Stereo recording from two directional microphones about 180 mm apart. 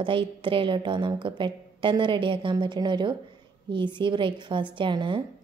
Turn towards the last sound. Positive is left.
turn(degrees=-25)  # may be behind; listen again after turning